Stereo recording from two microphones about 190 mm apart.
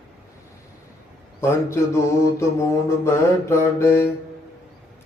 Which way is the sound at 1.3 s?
15° left (ahead or behind).